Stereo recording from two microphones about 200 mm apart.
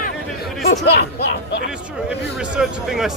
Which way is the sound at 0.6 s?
55° left (ahead or behind).